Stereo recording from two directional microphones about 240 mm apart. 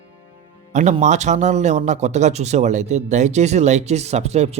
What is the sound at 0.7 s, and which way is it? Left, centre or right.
Speech, right.